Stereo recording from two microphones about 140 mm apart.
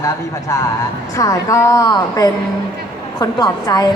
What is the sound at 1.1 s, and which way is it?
A woman's voice, 25° left (ahead or behind).